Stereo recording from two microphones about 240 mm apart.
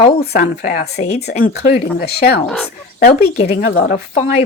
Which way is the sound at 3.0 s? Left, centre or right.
Left.